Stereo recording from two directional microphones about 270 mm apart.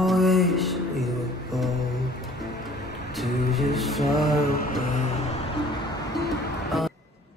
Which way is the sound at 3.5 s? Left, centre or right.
Centre.